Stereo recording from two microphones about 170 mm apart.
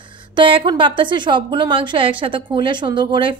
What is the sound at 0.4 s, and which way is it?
A woman's voice, 30° right (ahead or behind).